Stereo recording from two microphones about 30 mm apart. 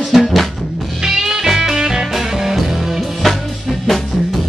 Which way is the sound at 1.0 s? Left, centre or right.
Centre.